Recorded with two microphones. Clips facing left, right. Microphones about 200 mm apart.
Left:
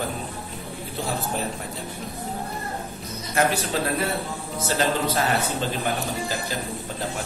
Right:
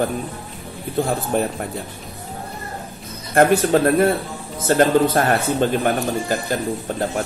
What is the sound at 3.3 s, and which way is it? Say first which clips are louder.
A man's voice: right 9 dB; 55° right (ahead or behind).